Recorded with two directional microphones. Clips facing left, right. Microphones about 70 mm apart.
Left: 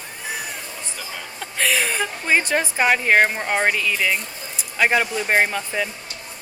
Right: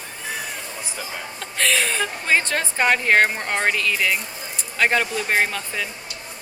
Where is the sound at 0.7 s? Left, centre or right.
Centre.